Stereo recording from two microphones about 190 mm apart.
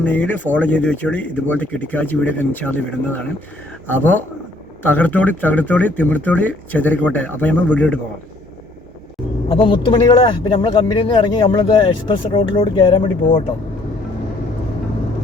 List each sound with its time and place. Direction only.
0.0 s speech: 10° left (ahead or behind)
9.5 s speech: 30° left (ahead or behind)